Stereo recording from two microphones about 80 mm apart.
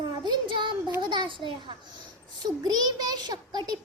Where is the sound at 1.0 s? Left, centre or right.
Right.